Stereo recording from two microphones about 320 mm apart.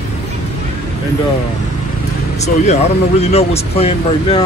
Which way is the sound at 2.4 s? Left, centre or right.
Centre.